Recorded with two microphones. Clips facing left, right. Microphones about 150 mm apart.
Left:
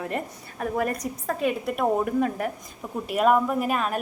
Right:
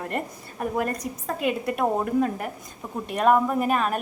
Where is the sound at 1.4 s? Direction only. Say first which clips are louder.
Right 1 dB; centre (ahead or behind).